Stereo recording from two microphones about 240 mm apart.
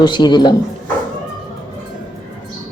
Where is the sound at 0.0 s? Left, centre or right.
Centre.